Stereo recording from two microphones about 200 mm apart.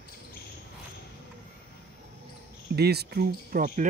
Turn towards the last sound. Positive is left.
turn(degrees=-40)  # may be behind; listen again after turning